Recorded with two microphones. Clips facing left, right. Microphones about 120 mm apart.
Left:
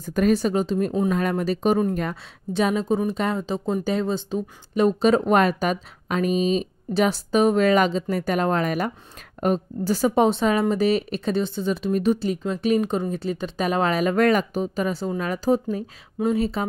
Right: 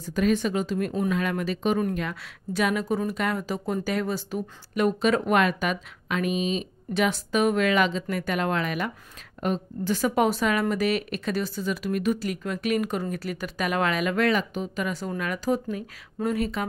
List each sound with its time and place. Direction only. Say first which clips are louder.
0.0 s speech: left 3 dB; 45° left (ahead or behind)
2.5 s a woman's voice: left 3 dB; 25° left (ahead or behind)